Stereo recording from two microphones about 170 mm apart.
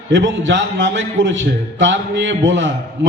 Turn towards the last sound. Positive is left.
turn(degrees=-90)